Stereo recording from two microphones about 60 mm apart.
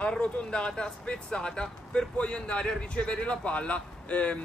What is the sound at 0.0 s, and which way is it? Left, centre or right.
A man's voice, centre.